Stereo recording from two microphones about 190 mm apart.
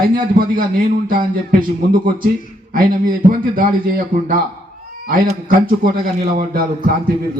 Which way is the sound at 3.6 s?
50° right (ahead or behind).